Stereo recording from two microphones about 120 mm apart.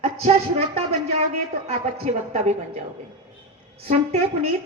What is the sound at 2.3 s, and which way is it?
Speech, 65° right (ahead or behind).